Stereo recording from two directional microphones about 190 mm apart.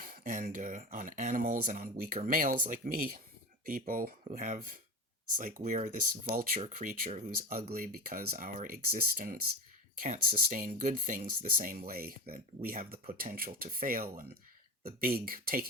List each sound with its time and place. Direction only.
0.0 s speech: 45° right (ahead or behind)